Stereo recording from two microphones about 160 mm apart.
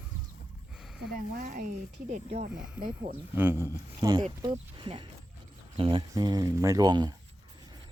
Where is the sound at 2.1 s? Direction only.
45° right (ahead or behind).